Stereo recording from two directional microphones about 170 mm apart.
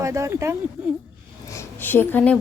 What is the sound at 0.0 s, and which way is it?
Speech, 20° right (ahead or behind).